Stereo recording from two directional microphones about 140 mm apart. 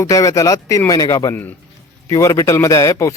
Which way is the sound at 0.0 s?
25° left (ahead or behind).